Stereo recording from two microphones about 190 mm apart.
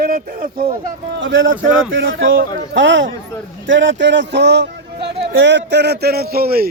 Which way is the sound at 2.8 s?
80° right.